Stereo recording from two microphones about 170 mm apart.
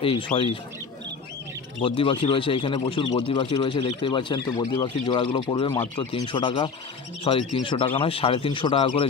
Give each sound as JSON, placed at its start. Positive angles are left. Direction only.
{"t": 0.0, "sound": "speech", "side_deg": 30}
{"t": 1.8, "sound": "speech", "side_deg": 30}